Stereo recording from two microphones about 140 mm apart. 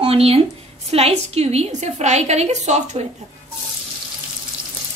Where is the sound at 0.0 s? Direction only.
45° right (ahead or behind).